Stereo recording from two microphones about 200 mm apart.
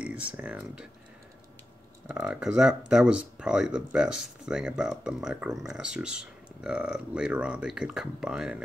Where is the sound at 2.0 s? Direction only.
5° right (ahead or behind).